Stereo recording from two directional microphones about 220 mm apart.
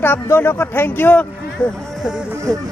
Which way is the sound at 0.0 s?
10° left (ahead or behind).